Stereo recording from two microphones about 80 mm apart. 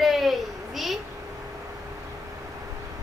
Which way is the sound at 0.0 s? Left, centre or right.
Centre.